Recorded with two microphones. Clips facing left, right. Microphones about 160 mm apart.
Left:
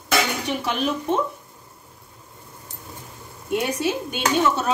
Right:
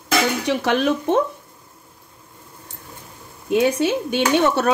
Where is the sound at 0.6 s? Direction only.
70° right (ahead or behind).